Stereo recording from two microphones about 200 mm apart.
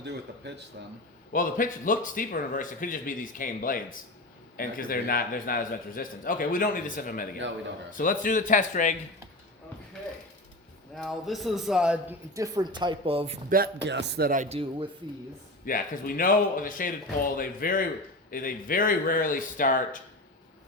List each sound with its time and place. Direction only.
0.0 s speech: 55° right (ahead or behind)
1.3 s a man's voice: 45° left (ahead or behind)
10.9 s a man's voice: centre (ahead or behind)
12.3 s speech: 15° right (ahead or behind)
13.5 s speech: 55° right (ahead or behind)
14.5 s speech: 25° right (ahead or behind)
15.6 s a man's voice: 45° left (ahead or behind)